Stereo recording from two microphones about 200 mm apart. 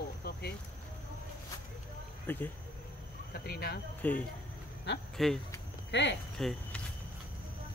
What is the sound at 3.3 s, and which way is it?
Speech, 50° left (ahead or behind).